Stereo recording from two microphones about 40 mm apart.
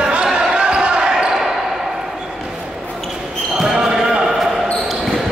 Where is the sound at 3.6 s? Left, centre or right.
Centre.